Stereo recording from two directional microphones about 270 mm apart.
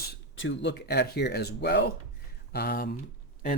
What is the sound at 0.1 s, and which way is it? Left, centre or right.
Speech, left.